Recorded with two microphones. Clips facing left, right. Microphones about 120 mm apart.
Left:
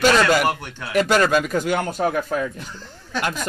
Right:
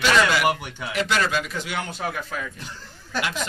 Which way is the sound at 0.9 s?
45° left (ahead or behind).